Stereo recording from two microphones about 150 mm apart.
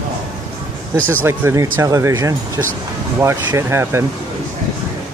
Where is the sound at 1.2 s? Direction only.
15° right (ahead or behind).